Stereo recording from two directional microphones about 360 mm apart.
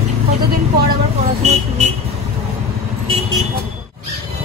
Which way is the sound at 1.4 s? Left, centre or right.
Centre.